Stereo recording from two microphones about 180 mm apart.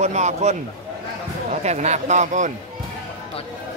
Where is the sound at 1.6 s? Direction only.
40° right (ahead or behind).